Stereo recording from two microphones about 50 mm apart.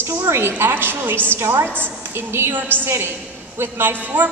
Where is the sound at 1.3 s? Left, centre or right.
Right.